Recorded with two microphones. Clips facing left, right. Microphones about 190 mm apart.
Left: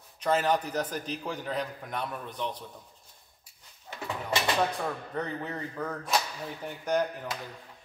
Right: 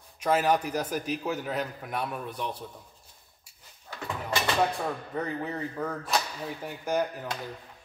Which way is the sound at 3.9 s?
20° left (ahead or behind).